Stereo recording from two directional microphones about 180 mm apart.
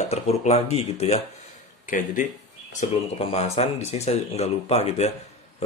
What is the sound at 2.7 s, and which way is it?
Speech, 40° left (ahead or behind).